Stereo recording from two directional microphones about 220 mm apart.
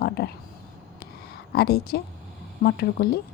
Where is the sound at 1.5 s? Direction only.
45° left (ahead or behind).